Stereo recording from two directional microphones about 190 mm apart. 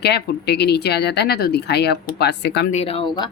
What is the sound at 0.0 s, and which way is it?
Speech, 60° left (ahead or behind).